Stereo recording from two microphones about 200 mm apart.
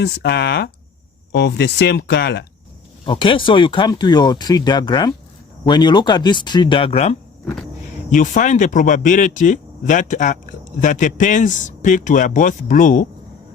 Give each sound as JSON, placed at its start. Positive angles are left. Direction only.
{"t": 0.0, "sound": "speech", "side_deg": 55}
{"t": 3.1, "sound": "speech", "side_deg": 25}